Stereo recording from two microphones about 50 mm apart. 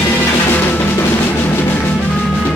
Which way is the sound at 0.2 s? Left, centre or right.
Left.